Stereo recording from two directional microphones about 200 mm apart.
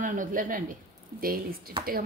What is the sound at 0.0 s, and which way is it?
Speech, 40° right (ahead or behind).